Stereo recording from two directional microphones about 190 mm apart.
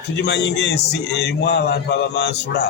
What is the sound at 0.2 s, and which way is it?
A man's voice, 65° left (ahead or behind).